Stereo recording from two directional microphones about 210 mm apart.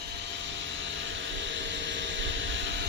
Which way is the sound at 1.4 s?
60° right (ahead or behind).